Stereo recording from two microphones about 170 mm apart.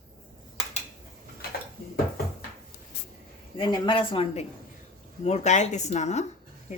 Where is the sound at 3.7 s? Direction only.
30° left (ahead or behind).